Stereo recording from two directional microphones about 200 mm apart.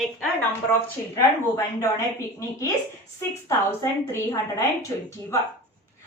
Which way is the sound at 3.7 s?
15° left (ahead or behind).